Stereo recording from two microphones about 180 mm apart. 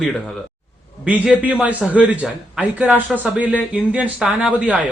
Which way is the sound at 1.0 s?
10° right (ahead or behind).